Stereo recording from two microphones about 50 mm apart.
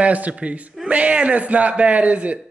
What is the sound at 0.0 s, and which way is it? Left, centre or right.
A man's voice, right.